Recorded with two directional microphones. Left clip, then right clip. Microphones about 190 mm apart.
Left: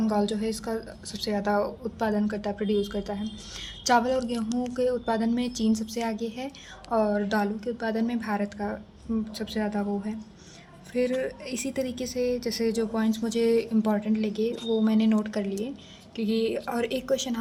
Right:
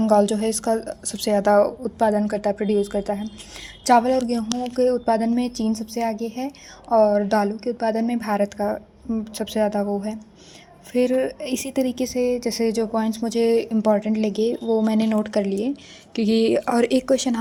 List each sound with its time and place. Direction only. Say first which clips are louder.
0.0 s a woman's voice: right 9 dB; 40° right (ahead or behind)
16.1 s speech: right 8 dB; 45° right (ahead or behind)